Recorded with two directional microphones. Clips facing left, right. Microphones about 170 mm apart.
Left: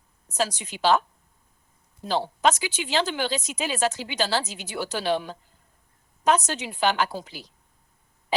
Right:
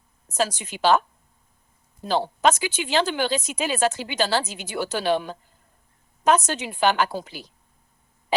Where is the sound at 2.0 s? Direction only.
50° right (ahead or behind).